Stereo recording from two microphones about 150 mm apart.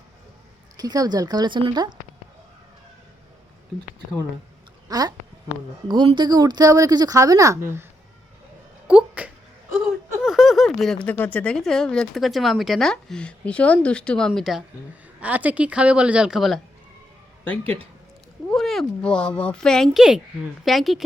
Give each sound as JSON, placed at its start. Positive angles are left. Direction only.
{"t": 0.8, "sound": "speech", "side_deg": -25}
{"t": 4.9, "sound": "speech", "side_deg": -25}
{"t": 8.9, "sound": "a sound", "side_deg": -10}
{"t": 10.2, "sound": "a woman's voice", "side_deg": 0}
{"t": 17.6, "sound": "speech", "side_deg": -40}
{"t": 18.5, "sound": "speech", "side_deg": 0}